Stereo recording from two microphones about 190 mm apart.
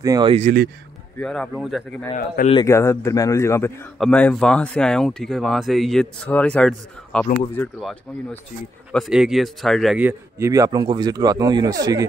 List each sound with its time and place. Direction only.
0.0 s speech: 20° right (ahead or behind)
0.3 s speech: 35° right (ahead or behind)
1.1 s speech: 5° left (ahead or behind)
2.1 s speech: 45° left (ahead or behind)
2.5 s a man's voice: 15° left (ahead or behind); by 12.1 s 20° right (ahead or behind)